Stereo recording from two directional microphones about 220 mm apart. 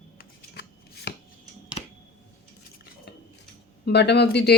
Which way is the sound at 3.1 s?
50° left (ahead or behind).